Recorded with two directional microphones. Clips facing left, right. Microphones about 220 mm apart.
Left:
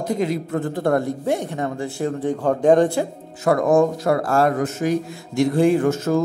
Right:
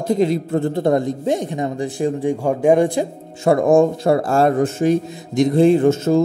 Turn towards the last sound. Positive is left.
turn(degrees=-25)  # may be behind; listen again after turning